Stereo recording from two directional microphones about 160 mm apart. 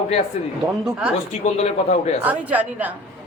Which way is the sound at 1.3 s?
45° left (ahead or behind).